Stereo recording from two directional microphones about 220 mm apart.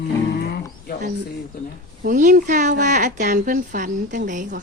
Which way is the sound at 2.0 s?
35° right (ahead or behind).